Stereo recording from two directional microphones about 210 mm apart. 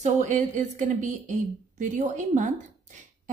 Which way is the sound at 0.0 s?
35° right (ahead or behind).